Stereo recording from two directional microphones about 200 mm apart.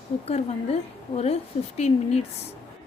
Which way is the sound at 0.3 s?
30° left (ahead or behind).